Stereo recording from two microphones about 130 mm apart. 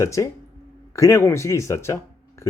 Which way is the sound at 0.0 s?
25° left (ahead or behind).